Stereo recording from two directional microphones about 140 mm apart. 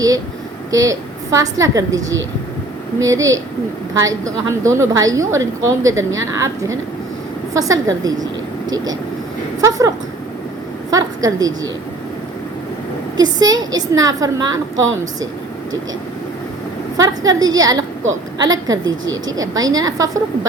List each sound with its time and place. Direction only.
0.7 s a woman's voice: 25° right (ahead or behind)
10.9 s a woman's voice: 25° right (ahead or behind)
13.1 s a woman's voice: 25° right (ahead or behind)
17.0 s a woman's voice: 25° right (ahead or behind)